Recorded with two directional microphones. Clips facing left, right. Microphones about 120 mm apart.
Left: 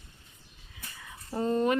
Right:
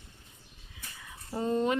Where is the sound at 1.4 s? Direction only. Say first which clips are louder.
Left 2 dB; 15° right (ahead or behind).